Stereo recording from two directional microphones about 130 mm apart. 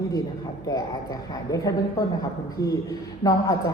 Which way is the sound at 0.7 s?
30° left (ahead or behind).